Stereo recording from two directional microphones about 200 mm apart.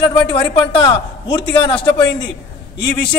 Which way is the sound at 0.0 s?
25° left (ahead or behind).